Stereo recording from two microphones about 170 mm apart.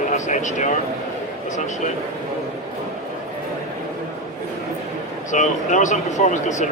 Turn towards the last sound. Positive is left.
turn(degrees=45)  # may be behind; listen again after turning